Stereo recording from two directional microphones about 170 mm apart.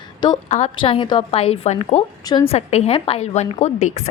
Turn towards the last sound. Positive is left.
turn(degrees=40)  # may be behind; listen again after turning